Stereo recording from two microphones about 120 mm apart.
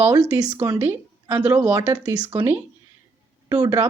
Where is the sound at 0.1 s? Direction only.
30° right (ahead or behind).